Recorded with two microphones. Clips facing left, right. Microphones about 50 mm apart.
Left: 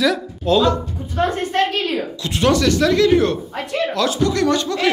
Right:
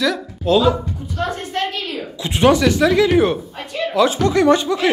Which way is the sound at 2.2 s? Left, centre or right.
Right.